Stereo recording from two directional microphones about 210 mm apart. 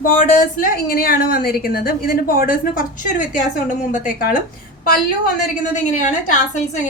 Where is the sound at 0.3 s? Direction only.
40° left (ahead or behind).